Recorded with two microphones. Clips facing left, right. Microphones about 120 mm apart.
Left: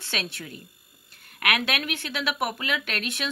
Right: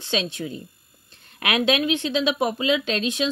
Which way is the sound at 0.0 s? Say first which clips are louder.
Right 8 dB; 20° right (ahead or behind).